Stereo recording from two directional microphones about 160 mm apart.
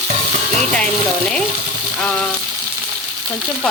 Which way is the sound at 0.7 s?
5° left (ahead or behind).